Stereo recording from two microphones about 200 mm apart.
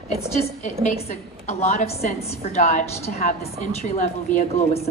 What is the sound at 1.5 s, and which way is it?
A woman's voice, 35° left (ahead or behind).